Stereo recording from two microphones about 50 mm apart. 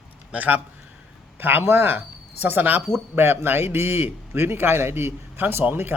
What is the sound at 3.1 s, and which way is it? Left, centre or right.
A man's voice, right.